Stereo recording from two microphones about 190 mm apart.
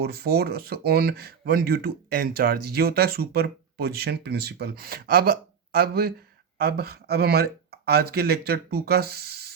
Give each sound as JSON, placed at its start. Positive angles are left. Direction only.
{"t": 0.0, "sound": "speech", "side_deg": -55}